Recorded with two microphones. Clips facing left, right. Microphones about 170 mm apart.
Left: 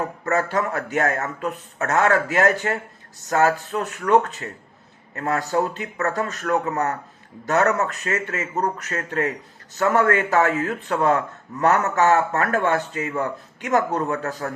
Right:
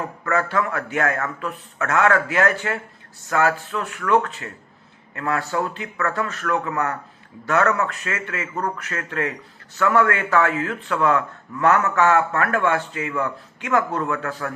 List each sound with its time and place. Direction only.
0.3 s speech: 40° left (ahead or behind)